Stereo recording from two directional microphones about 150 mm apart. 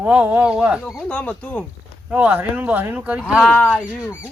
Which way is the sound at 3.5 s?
10° left (ahead or behind).